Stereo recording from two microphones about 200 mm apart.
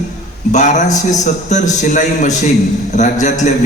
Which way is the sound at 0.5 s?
35° left (ahead or behind).